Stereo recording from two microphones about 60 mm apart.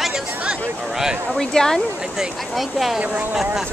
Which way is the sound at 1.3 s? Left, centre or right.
Centre.